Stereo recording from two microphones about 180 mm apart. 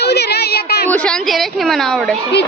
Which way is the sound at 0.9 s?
5° left (ahead or behind).